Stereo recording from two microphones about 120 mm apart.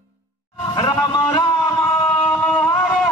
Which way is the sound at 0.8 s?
35° left (ahead or behind).